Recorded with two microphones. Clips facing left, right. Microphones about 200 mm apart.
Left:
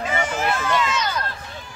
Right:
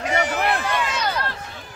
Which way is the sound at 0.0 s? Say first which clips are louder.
Right 2 dB; 70° right (ahead or behind).